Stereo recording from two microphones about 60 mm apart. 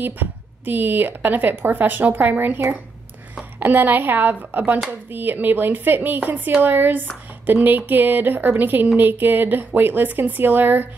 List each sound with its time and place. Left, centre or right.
0.0 s a woman's voice: right